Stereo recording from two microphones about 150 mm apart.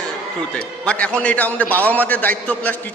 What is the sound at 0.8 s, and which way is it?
A man's voice, 10° left (ahead or behind).